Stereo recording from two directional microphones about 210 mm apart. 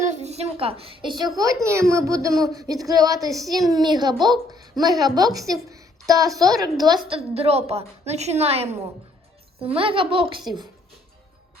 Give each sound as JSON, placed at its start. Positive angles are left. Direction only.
{"t": 0.0, "sound": "a woman's voice", "side_deg": -35}